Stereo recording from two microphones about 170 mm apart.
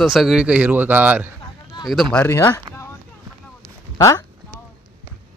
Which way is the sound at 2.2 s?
15° left (ahead or behind).